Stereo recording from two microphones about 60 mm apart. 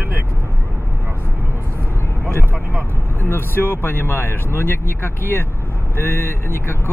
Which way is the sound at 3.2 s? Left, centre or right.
Left.